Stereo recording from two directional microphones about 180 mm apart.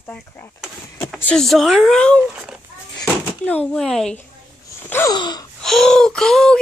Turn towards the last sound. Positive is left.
turn(degrees=5)  # may be behind; listen again after turning